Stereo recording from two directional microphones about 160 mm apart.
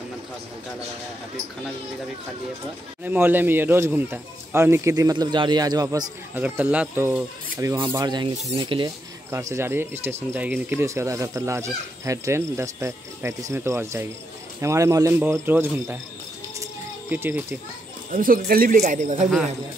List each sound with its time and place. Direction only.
3.0 s speech: 10° right (ahead or behind)
6.3 s speech: 10° right (ahead or behind); by 8.9 s 30° right (ahead or behind)
9.3 s speech: 15° right (ahead or behind)
17.1 s speech: 10° right (ahead or behind)
18.1 s speech: 60° right (ahead or behind)
18.8 s speech: 50° right (ahead or behind)